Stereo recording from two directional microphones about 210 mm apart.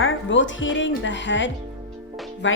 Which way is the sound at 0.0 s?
65° left (ahead or behind).